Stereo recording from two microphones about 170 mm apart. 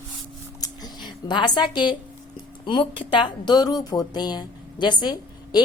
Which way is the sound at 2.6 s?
30° left (ahead or behind).